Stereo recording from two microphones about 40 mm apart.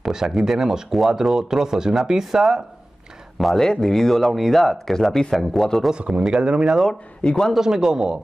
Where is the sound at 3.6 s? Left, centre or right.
Centre.